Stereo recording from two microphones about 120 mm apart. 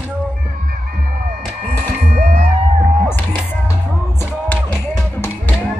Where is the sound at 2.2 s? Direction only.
75° right (ahead or behind).